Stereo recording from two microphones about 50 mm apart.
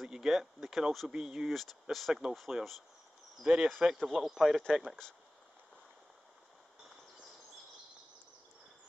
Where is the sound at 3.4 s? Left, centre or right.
Centre.